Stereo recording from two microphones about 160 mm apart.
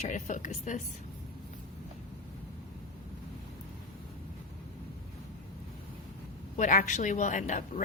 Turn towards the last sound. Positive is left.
turn(degrees=50)  # may be behind; listen again after turning